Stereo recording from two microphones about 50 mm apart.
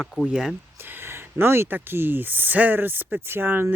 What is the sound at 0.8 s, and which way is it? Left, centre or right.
Speech, right.